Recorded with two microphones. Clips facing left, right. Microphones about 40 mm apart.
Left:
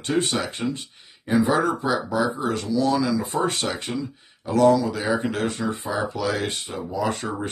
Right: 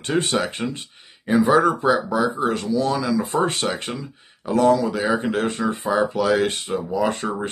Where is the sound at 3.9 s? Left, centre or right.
Right.